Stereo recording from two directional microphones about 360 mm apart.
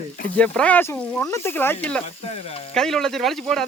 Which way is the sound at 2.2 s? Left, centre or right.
Centre.